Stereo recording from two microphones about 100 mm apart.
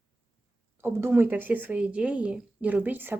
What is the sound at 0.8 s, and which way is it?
Speech, 25° right (ahead or behind).